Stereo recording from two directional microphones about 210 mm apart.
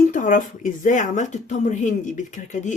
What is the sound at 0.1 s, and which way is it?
Speech, 40° left (ahead or behind).